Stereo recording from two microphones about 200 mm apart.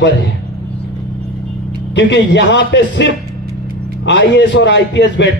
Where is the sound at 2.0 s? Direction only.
65° left (ahead or behind).